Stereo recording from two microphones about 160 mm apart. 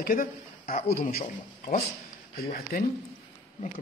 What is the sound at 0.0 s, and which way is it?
A man's voice, 60° left (ahead or behind).